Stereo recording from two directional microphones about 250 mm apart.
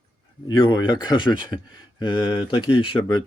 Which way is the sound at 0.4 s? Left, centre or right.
Centre.